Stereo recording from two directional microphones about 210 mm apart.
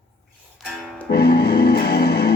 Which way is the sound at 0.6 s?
Centre (ahead or behind).